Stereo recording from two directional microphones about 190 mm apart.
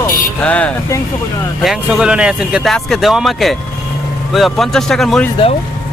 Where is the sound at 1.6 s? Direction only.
5° right (ahead or behind).